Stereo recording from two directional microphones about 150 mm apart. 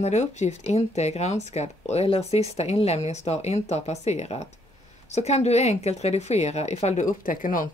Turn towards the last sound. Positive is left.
turn(degrees=65)  # may be behind; listen again after turning